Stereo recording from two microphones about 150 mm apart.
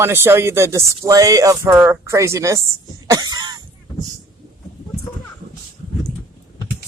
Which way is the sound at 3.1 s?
25° right (ahead or behind).